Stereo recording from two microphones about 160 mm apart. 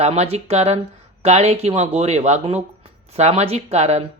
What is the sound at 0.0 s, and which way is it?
Speech, 40° right (ahead or behind).